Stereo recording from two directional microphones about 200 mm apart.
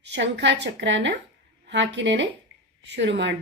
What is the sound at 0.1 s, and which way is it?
Speech, 60° right (ahead or behind).